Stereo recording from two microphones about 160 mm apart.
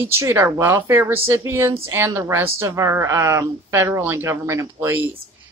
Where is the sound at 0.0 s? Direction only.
15° right (ahead or behind).